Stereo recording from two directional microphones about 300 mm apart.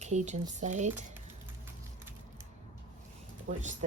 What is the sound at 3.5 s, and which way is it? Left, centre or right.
Speech, right.